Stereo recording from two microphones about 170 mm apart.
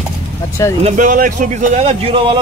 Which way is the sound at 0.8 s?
50° right (ahead or behind).